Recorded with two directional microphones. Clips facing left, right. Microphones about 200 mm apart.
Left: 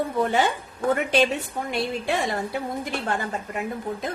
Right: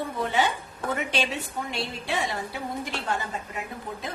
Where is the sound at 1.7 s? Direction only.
50° left (ahead or behind).